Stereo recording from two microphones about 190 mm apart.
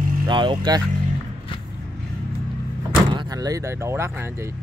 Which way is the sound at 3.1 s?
20° right (ahead or behind).